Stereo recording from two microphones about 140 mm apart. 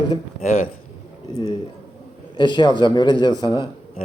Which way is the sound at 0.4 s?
75° left (ahead or behind).